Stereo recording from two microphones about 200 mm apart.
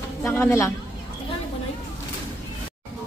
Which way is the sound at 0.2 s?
10° left (ahead or behind).